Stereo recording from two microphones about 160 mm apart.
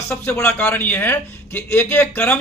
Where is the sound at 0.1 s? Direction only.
15° left (ahead or behind).